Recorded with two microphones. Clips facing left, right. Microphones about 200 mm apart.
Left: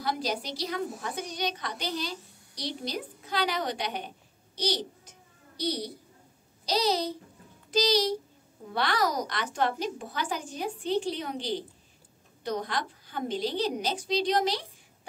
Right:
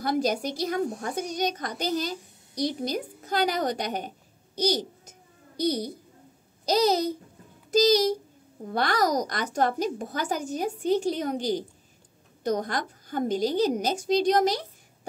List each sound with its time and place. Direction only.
0.0 s a child's voice: 50° right (ahead or behind)